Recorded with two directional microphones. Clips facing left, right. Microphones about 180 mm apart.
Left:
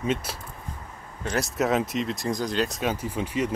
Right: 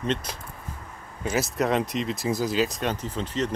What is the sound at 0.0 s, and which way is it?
Speech, 5° left (ahead or behind).